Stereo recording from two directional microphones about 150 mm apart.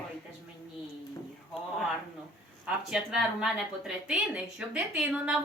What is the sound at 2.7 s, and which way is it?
A woman's voice, 5° right (ahead or behind).